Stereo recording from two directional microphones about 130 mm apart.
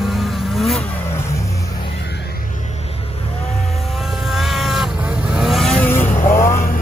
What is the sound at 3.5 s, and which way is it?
Vehicle, centre (ahead or behind).